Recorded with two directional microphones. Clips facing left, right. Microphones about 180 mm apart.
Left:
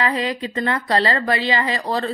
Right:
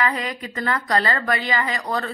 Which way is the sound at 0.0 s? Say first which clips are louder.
Left 3 dB; 30° left (ahead or behind).